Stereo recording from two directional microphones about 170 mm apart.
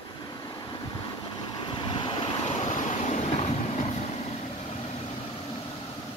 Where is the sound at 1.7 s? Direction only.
25° left (ahead or behind).